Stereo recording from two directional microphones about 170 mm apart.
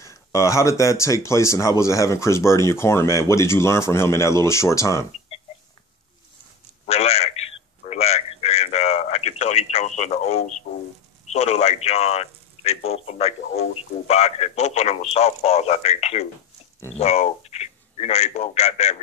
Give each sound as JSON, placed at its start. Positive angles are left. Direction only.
{"t": 0.0, "sound": "speech", "side_deg": 20}
{"t": 6.9, "sound": "a sound", "side_deg": 40}
{"t": 11.3, "sound": "a man's voice", "side_deg": 40}